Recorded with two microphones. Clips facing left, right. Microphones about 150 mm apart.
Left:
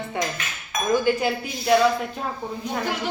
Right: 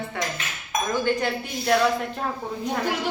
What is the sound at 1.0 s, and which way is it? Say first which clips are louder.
Speech: left 2 dB; 5° left (ahead or behind).